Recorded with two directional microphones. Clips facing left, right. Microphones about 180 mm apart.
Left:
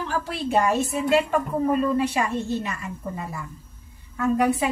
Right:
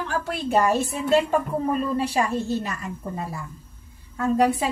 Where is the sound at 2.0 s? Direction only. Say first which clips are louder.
Even; 35° right (ahead or behind).